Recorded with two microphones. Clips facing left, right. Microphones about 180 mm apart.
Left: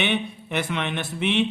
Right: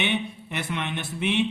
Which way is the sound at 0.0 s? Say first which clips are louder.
Left 2 dB; 90° left.